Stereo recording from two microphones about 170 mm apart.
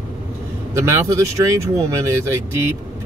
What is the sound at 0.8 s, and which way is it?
Speech, 15° right (ahead or behind).